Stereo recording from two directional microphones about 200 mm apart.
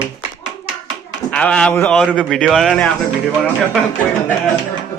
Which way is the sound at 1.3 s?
5° left (ahead or behind).